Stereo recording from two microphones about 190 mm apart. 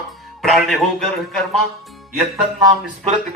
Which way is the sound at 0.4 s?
Centre (ahead or behind).